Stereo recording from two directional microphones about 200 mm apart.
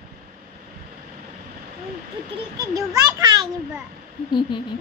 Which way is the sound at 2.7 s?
20° right (ahead or behind).